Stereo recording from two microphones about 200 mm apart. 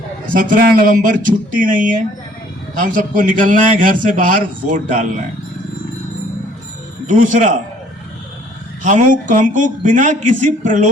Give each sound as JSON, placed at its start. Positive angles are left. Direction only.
{"t": 0.3, "sound": "a man's voice", "side_deg": -40}
{"t": 7.1, "sound": "a man's voice", "side_deg": -40}
{"t": 8.8, "sound": "a man's voice", "side_deg": -40}